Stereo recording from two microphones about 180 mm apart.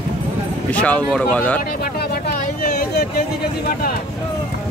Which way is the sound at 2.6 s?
55° left (ahead or behind).